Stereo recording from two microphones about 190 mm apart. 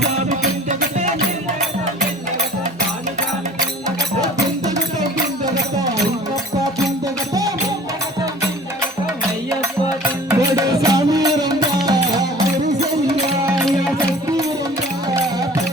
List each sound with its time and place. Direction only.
0.3 s music: 40° right (ahead or behind)
10.2 s music: 15° right (ahead or behind)
13.6 s music: centre (ahead or behind)